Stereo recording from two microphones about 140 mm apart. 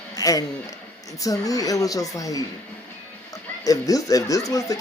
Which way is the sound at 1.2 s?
25° left (ahead or behind).